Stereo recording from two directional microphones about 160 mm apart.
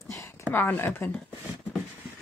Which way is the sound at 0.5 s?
10° left (ahead or behind).